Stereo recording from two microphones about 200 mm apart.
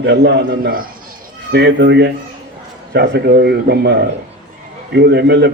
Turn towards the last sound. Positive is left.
turn(degrees=-55)  # may be behind; listen again after turning